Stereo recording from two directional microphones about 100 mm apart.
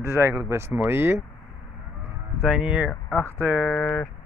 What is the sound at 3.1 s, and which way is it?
Speech, 20° left (ahead or behind).